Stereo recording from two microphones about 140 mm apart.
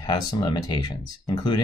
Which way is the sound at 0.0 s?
30° left (ahead or behind).